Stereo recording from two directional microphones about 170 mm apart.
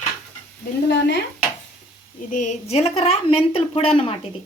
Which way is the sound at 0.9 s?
85° left.